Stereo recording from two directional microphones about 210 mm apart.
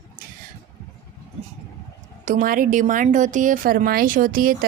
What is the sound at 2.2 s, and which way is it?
A woman's voice, 40° right (ahead or behind).